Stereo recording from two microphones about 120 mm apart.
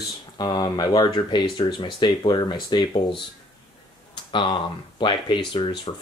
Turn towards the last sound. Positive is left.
turn(degrees=40)  # may be behind; listen again after turning